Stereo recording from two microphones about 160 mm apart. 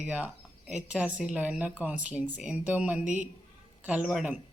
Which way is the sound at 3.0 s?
50° right (ahead or behind).